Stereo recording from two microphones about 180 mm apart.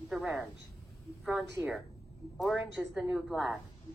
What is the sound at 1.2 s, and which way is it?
A woman's voice, centre (ahead or behind).